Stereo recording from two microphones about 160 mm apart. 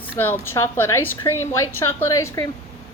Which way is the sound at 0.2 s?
15° left (ahead or behind).